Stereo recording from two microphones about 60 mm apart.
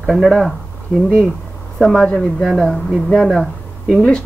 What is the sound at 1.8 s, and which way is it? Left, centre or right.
Speech, centre.